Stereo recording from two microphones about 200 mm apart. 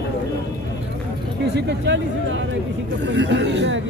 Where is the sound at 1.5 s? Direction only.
60° right (ahead or behind).